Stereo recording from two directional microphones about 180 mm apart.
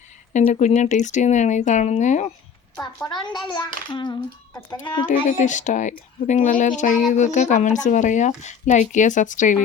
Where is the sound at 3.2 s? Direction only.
25° left (ahead or behind).